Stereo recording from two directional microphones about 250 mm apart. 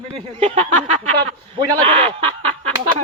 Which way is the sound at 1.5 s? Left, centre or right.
Right.